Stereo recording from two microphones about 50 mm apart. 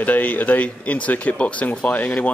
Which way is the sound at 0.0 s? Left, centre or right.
Left.